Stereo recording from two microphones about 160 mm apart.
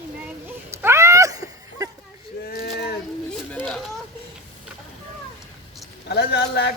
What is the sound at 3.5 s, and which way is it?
Speech, centre (ahead or behind).